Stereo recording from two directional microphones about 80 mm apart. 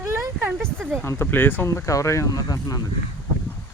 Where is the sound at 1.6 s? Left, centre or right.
Left.